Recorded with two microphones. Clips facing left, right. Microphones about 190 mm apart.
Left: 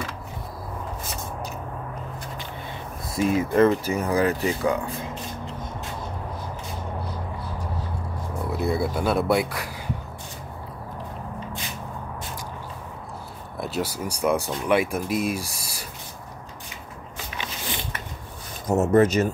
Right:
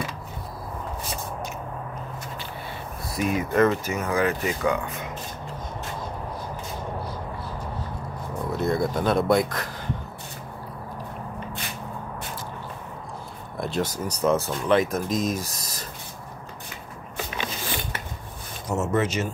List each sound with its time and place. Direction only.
3.2 s speech: 30° left (ahead or behind)
8.5 s speech: 10° left (ahead or behind)
13.6 s speech: 5° left (ahead or behind)
18.7 s speech: 40° left (ahead or behind)